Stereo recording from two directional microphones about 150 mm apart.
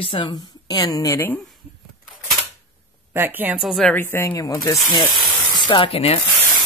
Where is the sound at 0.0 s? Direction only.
35° left (ahead or behind).